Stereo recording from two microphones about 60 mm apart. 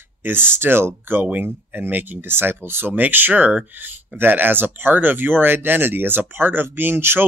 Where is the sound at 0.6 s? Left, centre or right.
Right.